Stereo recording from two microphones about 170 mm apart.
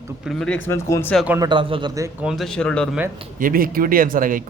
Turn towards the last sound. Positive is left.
turn(degrees=-55)  # may be behind; listen again after turning